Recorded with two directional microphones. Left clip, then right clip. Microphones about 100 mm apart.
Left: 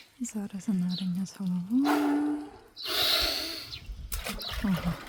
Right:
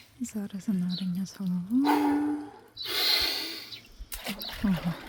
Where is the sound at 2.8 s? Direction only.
20° left (ahead or behind).